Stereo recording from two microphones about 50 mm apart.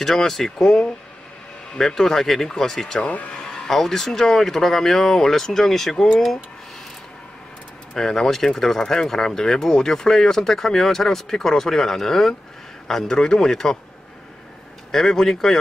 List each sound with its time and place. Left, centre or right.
0.0 s speech: centre
3.0 s speech: left
3.3 s speech: centre
7.9 s speech: centre
14.9 s speech: centre